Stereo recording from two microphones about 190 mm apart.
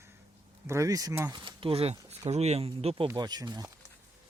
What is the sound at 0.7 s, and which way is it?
Speech, 15° right (ahead or behind).